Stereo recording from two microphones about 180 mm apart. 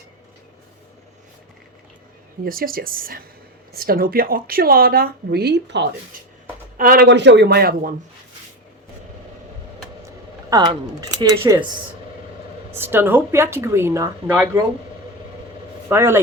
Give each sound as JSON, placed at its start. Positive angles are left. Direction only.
{"t": 2.4, "sound": "a woman's voice", "side_deg": -55}
{"t": 6.7, "sound": "speech", "side_deg": -55}
{"t": 10.5, "sound": "speech", "side_deg": -20}
{"t": 12.7, "sound": "speech", "side_deg": -10}
{"t": 15.9, "sound": "speech", "side_deg": -15}